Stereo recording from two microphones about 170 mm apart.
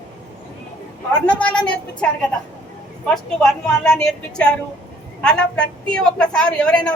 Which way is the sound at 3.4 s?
5° left (ahead or behind).